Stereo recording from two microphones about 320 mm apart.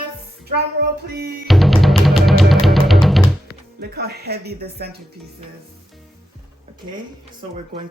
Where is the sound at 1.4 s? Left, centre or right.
Centre.